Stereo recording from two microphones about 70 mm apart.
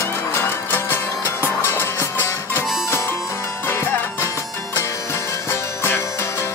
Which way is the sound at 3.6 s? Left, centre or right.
Left.